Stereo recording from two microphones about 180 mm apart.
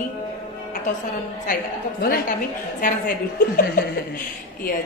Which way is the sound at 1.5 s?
55° left (ahead or behind).